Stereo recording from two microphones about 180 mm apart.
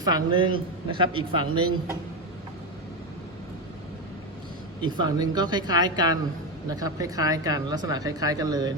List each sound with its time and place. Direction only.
0.0 s speech: 25° right (ahead or behind)
4.8 s speech: 20° right (ahead or behind)